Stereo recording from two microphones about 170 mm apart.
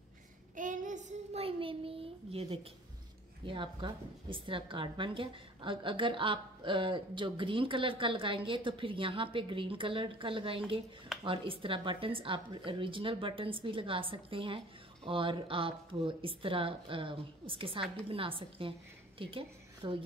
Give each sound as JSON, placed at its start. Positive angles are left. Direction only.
{"t": 0.6, "sound": "child singing", "side_deg": -50}
{"t": 3.4, "sound": "a woman's voice", "side_deg": -30}